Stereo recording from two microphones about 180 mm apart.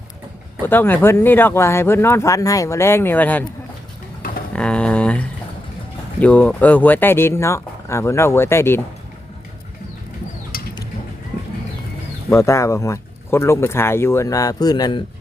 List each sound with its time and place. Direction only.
0.6 s speech: 10° left (ahead or behind)
4.5 s a sound: 5° left (ahead or behind)
6.1 s speech: 10° left (ahead or behind)
12.3 s speech: 15° left (ahead or behind)